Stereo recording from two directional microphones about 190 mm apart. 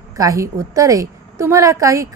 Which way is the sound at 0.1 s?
15° right (ahead or behind).